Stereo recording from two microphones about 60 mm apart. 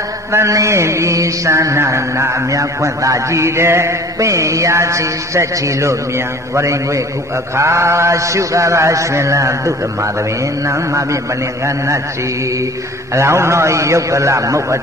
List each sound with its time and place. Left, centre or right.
0.5 s mantra: right
13.1 s mantra: right